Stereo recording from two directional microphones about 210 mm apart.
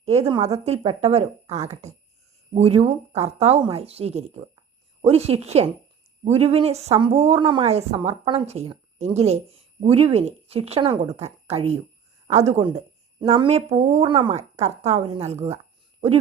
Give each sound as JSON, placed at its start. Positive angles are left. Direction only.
{"t": 0.0, "sound": "a woman's voice", "side_deg": -30}